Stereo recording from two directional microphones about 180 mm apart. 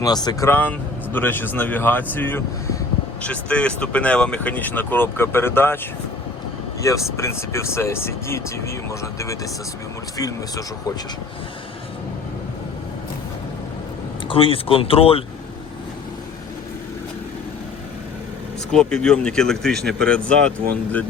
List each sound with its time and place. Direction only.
0.0 s speech: 20° left (ahead or behind)
6.8 s speech: 15° left (ahead or behind)
14.3 s speech: 30° left (ahead or behind)
18.7 s speech: 5° left (ahead or behind)